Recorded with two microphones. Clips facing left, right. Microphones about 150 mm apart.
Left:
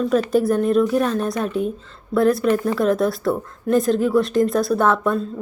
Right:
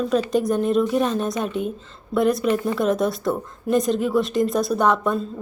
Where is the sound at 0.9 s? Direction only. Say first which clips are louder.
Left 1 dB; 20° right (ahead or behind).